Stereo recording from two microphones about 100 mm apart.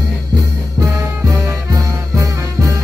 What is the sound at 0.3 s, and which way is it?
Music, 35° right (ahead or behind).